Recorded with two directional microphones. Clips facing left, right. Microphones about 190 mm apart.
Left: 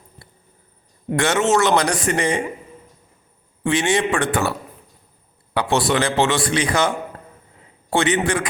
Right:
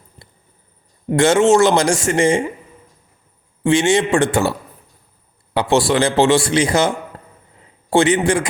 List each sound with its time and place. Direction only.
1.1 s a man's voice: 25° right (ahead or behind)
3.6 s a man's voice: 25° right (ahead or behind)
5.5 s a man's voice: 25° right (ahead or behind)